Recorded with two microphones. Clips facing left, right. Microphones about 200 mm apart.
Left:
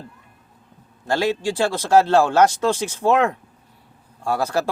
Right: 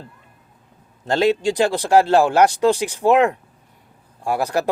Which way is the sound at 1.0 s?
20° right (ahead or behind).